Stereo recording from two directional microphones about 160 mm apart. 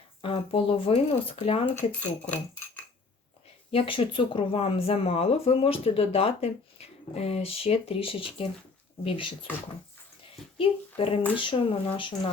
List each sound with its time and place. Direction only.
0.2 s speech: 35° left (ahead or behind)
2.0 s speech: 10° left (ahead or behind)
3.7 s speech: 35° left (ahead or behind)
10.6 s speech: 35° left (ahead or behind)